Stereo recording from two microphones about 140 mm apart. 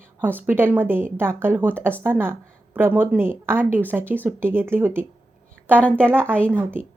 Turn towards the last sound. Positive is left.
turn(degrees=10)  # may be behind; listen again after turning